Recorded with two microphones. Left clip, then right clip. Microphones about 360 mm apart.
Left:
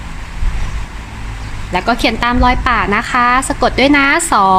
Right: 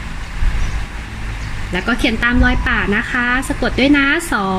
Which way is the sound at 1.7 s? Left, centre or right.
Centre.